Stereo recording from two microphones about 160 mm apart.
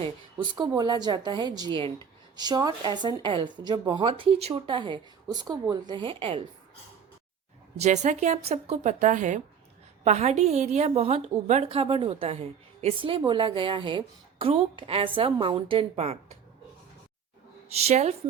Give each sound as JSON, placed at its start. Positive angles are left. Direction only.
{"t": 0.0, "sound": "a woman's voice", "side_deg": -30}
{"t": 7.8, "sound": "a woman's voice", "side_deg": -45}
{"t": 17.7, "sound": "a woman's voice", "side_deg": -40}